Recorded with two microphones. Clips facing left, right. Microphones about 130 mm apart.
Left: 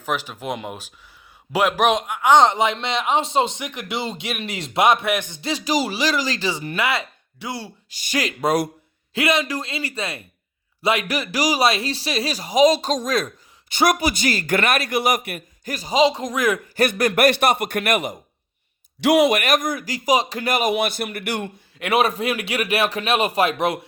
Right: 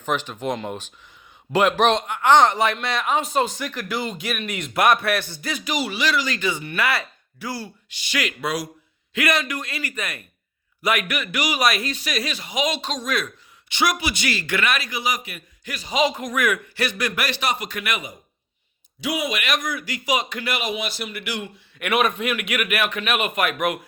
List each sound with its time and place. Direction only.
0.0 s a man's voice: 5° left (ahead or behind); by 6.7 s 35° left (ahead or behind)
6.7 s speech: 20° left (ahead or behind)
7.9 s speech: 40° left (ahead or behind)
9.1 s a man's voice: 25° left (ahead or behind); by 16.0 s 40° left (ahead or behind)
16.0 s a man's voice: 30° left (ahead or behind)
16.7 s speech: 50° left (ahead or behind)
19.0 s speech: 75° left (ahead or behind)
19.4 s speech: 45° left (ahead or behind)
20.7 s a man's voice: 55° left (ahead or behind)
21.8 s a man's voice: 30° left (ahead or behind)